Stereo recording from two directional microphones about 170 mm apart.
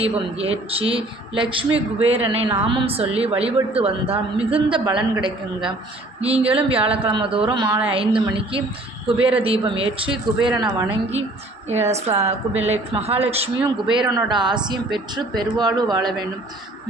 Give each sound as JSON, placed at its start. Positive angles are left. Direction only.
{"t": 0.0, "sound": "speech", "side_deg": -35}
{"t": 14.1, "sound": "speech", "side_deg": -25}